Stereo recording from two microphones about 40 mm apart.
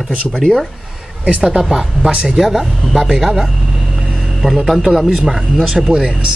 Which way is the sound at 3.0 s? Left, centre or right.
Centre.